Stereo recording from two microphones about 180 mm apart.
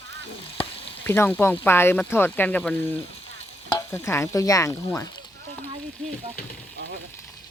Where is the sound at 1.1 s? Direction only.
10° left (ahead or behind).